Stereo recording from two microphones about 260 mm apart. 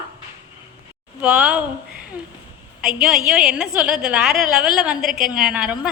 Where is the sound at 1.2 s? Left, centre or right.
Centre.